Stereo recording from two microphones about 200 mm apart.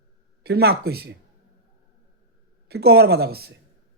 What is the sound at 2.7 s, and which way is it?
Speech, 55° right (ahead or behind).